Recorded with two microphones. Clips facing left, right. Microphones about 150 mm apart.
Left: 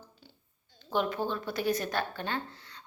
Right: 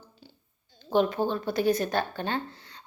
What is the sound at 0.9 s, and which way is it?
A woman's voice, 30° right (ahead or behind).